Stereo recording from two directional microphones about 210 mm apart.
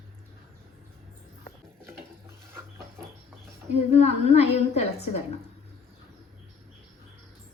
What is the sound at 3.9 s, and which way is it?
A woman's voice, 30° left (ahead or behind).